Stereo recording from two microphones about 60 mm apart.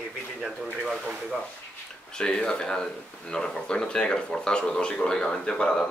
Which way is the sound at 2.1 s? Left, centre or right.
Centre.